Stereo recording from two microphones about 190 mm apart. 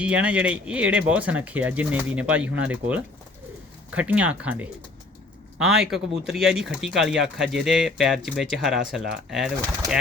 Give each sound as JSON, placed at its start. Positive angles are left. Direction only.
{"t": 0.0, "sound": "speech", "side_deg": -5}